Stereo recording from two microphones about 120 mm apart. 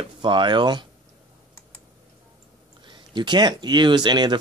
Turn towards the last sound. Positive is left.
turn(degrees=-35)  # may be behind; listen again after turning